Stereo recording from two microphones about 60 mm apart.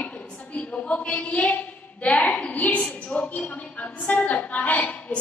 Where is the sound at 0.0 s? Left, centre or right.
Left.